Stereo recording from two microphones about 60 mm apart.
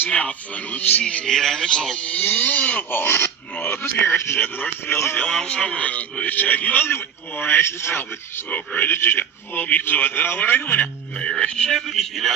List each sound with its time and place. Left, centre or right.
0.1 s a man's voice: left
1.0 s speech: centre
2.0 s a man's voice: left
5.2 s a man's voice: centre; by 8.4 s left
8.4 s speech: left
11.2 s speech: centre
11.7 s speech: centre